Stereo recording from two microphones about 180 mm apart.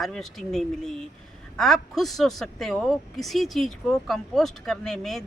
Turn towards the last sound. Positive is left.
turn(degrees=0)  # may be behind; listen again after turning